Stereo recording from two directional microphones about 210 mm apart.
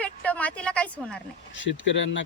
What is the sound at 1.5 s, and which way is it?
Speech, 60° left (ahead or behind).